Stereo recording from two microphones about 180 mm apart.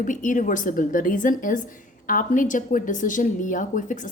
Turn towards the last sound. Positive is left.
turn(degrees=45)  # may be behind; listen again after turning